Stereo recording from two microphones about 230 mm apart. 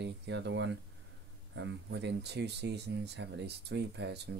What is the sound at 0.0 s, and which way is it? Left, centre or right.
Speech, right.